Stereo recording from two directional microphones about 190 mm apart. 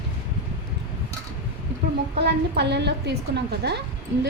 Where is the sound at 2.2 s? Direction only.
60° right (ahead or behind).